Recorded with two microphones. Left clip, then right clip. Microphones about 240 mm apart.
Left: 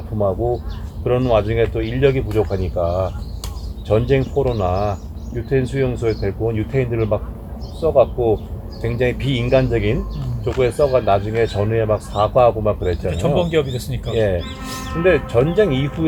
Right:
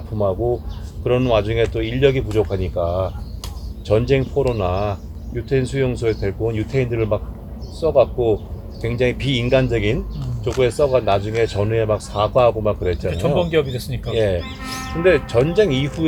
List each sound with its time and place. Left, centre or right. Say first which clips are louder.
1.0 s speech: left 1 dB; right